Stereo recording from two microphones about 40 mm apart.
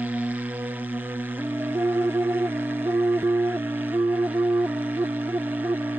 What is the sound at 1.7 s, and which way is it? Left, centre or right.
Music, right.